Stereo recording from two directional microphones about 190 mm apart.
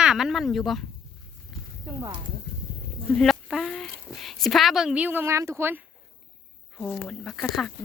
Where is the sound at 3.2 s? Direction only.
Centre (ahead or behind).